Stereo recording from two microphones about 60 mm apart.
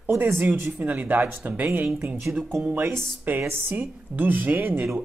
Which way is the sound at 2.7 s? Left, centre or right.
Right.